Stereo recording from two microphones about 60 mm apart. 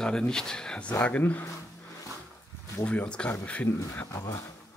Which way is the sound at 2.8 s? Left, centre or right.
Left.